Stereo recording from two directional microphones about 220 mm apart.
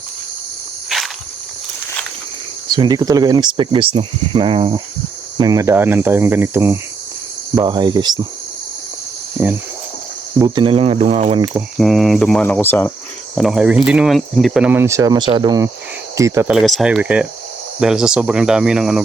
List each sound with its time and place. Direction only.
0.9 s insect: centre (ahead or behind)
2.6 s speech: 20° right (ahead or behind)
10.3 s speech: 20° right (ahead or behind)
11.5 s speech: centre (ahead or behind)